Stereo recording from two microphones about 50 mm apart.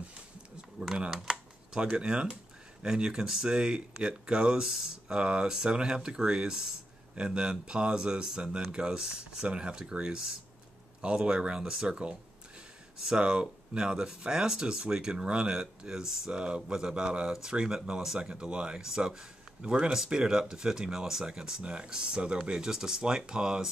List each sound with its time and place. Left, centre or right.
1.3 s computer keyboard: centre
2.0 s speech: centre